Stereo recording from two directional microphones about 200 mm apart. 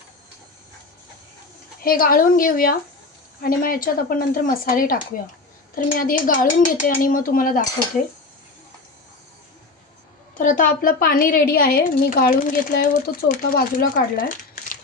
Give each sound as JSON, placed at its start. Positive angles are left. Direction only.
{"t": 1.8, "sound": "speech", "side_deg": 45}
{"t": 10.3, "sound": "speech", "side_deg": 40}